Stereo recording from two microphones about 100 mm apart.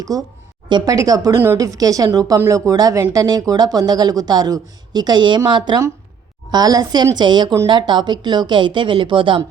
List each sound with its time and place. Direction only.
0.0 s speech: 40° right (ahead or behind); by 9.4 s 55° right (ahead or behind)